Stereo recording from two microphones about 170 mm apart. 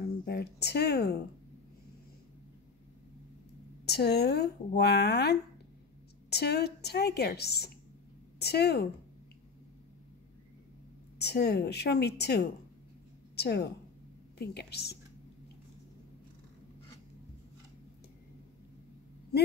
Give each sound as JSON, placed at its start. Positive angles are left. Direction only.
{"t": 0.0, "sound": "speech", "side_deg": 70}
{"t": 3.8, "sound": "speech", "side_deg": 75}
{"t": 11.1, "sound": "a woman's voice", "side_deg": 70}